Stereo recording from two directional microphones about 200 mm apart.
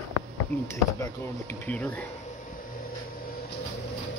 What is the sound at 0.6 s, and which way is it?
Speech, 15° left (ahead or behind).